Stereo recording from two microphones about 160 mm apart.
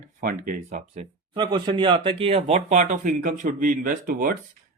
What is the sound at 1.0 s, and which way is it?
Speech, 30° right (ahead or behind).